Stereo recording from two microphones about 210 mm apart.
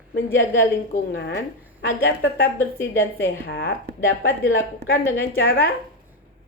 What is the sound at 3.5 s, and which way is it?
Speech, 45° left (ahead or behind).